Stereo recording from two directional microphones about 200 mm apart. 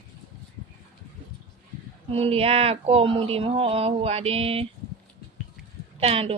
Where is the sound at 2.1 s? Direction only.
30° right (ahead or behind).